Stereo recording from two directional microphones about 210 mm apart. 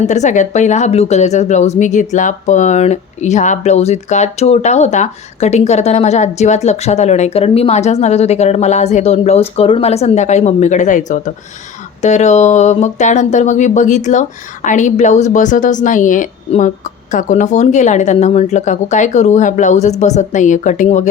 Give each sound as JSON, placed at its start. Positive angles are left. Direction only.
{"t": 0.1, "sound": "a woman's voice", "side_deg": 35}